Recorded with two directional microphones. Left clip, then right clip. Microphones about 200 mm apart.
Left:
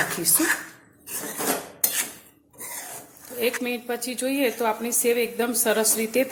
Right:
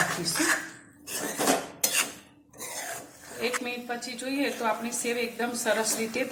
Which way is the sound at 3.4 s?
50° left (ahead or behind).